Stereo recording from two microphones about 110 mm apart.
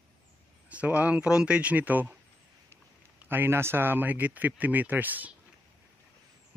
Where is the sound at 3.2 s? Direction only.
20° right (ahead or behind).